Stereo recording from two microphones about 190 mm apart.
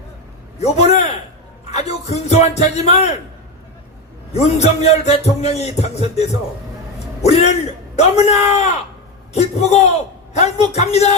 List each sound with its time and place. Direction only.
0.6 s a man's voice: 35° left (ahead or behind)
4.3 s a man's voice: 35° left (ahead or behind)